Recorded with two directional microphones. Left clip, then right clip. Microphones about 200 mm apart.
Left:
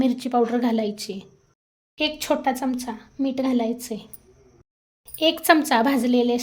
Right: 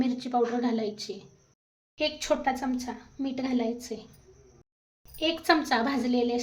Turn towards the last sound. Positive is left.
turn(degrees=45)  # may be behind; listen again after turning